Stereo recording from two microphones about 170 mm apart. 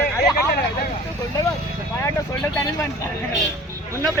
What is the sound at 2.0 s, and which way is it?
Speech, 15° left (ahead or behind).